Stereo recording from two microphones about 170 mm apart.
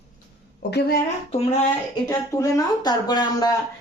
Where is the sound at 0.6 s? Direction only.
75° left (ahead or behind).